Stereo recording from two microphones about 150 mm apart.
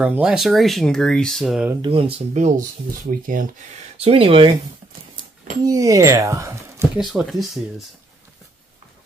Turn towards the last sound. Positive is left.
turn(degrees=0)  # may be behind; listen again after turning